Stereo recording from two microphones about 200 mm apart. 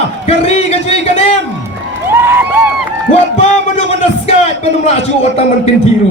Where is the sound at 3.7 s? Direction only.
30° left (ahead or behind).